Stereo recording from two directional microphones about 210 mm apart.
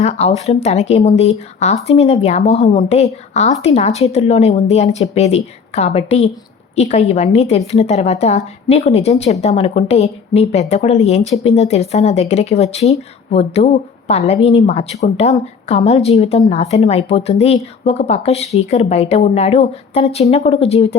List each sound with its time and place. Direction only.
0.0 s speech: 30° left (ahead or behind)